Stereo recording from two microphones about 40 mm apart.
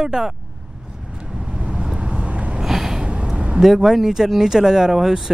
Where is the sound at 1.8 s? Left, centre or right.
Right.